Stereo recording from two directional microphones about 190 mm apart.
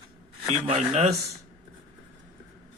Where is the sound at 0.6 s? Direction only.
35° right (ahead or behind).